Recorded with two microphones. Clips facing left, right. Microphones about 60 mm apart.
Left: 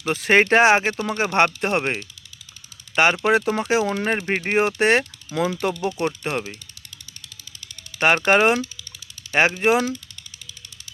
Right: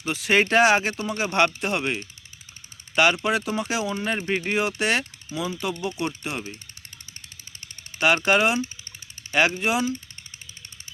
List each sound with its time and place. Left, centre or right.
0.0 s speech: left
5.3 s speech: left
7.9 s speech: left